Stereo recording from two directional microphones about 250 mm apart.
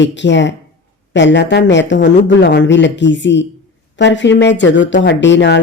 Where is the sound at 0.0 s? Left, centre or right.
Left.